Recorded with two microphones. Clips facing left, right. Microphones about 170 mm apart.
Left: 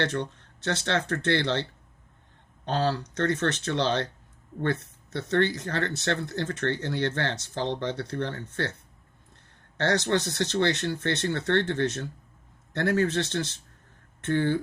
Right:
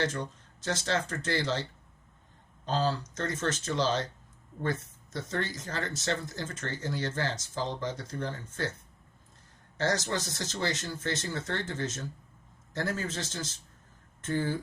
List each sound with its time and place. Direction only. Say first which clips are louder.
0.0 s speech: left 3 dB; 65° left (ahead or behind)
2.6 s speech: left 3 dB; 65° left (ahead or behind)
9.7 s speech: left 5 dB; 65° left (ahead or behind)